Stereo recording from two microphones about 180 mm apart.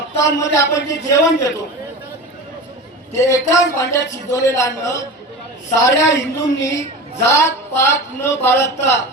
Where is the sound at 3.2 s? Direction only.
15° left (ahead or behind).